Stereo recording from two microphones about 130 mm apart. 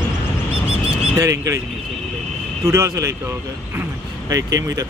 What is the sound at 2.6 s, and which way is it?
Speech, 20° right (ahead or behind).